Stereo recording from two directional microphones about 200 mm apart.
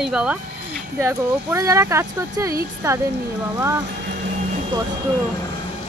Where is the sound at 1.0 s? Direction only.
15° right (ahead or behind).